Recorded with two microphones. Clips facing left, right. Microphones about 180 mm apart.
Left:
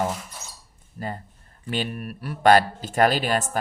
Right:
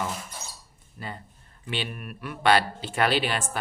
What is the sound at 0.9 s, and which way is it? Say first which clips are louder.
Speech: left 6 dB; 40° left (ahead or behind).